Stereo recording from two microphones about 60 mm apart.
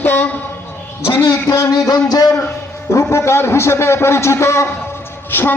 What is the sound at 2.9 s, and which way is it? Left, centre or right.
A man's voice, left.